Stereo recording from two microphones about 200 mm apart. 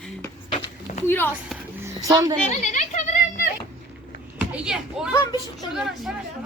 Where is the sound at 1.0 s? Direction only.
10° left (ahead or behind).